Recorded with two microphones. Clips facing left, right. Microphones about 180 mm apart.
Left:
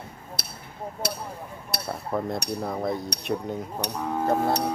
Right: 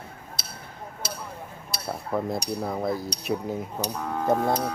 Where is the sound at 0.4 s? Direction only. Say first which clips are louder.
Left 3 dB; 60° left (ahead or behind).